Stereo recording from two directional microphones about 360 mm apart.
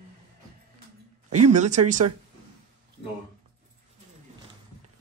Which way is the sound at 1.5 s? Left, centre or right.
Centre.